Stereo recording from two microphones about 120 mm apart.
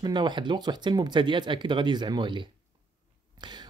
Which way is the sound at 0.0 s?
40° right (ahead or behind).